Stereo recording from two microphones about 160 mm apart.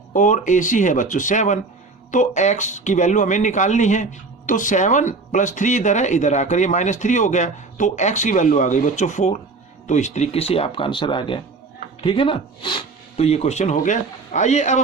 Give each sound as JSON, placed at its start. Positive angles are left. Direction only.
{"t": 0.1, "sound": "speech", "side_deg": 50}